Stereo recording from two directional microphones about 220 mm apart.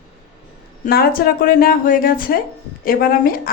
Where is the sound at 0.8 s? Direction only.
45° left (ahead or behind).